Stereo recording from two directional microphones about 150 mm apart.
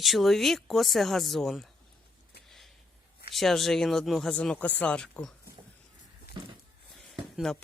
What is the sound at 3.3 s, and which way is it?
Speech, centre (ahead or behind).